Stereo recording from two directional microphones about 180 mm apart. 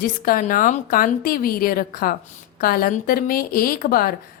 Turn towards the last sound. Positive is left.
turn(degrees=55)  # may be behind; listen again after turning